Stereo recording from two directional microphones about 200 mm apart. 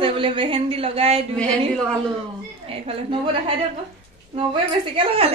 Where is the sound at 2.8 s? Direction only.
25° right (ahead or behind).